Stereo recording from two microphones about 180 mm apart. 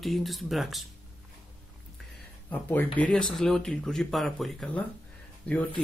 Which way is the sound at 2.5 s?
10° left (ahead or behind).